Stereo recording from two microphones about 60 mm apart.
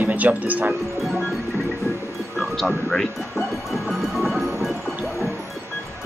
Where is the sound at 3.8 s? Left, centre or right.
Centre.